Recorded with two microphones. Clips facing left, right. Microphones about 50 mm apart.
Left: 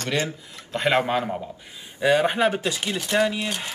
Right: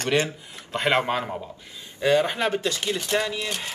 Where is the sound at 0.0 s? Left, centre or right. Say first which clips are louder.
Right 2 dB; right.